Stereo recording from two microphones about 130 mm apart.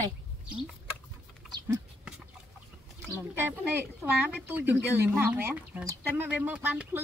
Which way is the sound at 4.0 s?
10° right (ahead or behind).